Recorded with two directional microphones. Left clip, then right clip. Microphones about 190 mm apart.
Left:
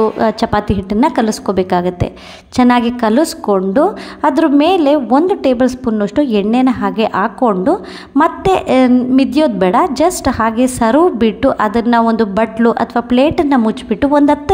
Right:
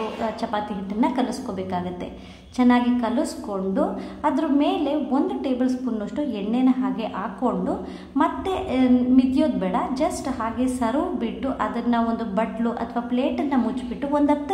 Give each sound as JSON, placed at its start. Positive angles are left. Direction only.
{"t": 0.2, "sound": "a woman's voice", "side_deg": 50}